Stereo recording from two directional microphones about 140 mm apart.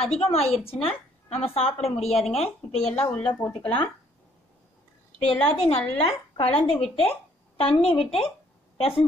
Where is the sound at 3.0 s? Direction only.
10° left (ahead or behind).